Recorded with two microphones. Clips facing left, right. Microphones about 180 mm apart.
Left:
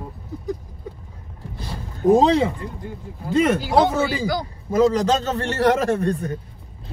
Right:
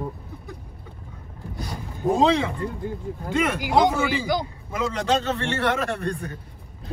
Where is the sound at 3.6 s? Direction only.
15° right (ahead or behind).